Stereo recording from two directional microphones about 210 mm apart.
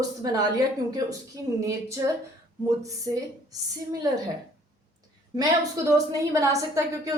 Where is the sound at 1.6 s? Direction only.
15° right (ahead or behind).